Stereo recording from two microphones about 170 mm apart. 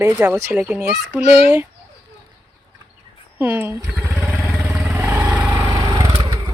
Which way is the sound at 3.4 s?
15° right (ahead or behind).